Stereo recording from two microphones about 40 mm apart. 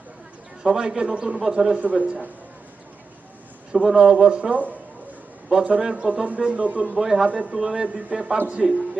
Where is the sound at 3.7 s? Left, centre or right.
Centre.